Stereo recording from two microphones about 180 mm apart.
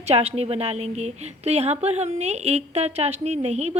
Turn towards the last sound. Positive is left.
turn(degrees=-35)  # may be behind; listen again after turning